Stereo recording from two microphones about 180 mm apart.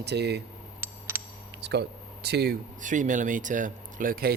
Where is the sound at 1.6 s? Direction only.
70° right (ahead or behind).